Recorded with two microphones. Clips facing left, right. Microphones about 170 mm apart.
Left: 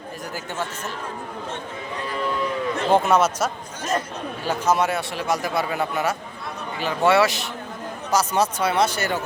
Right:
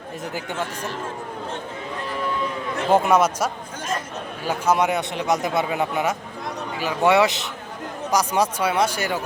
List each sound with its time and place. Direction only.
2.9 s a man's voice: 10° right (ahead or behind)